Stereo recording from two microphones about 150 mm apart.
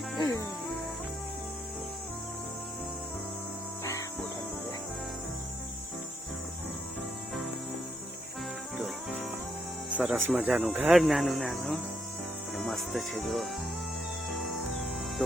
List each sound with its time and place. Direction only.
0.2 s music: 25° left (ahead or behind)
10.0 s speech: 10° right (ahead or behind)